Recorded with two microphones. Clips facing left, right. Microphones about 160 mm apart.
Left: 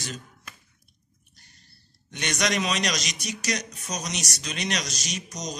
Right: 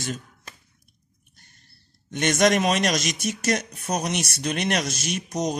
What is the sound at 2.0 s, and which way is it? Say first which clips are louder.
Speech: right 8 dB; 50° right (ahead or behind).